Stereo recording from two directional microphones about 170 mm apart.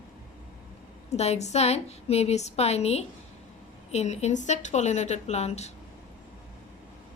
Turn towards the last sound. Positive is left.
turn(degrees=40)  # may be behind; listen again after turning